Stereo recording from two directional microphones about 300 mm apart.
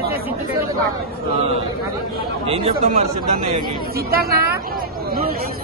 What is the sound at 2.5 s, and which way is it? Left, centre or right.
Speech, centre.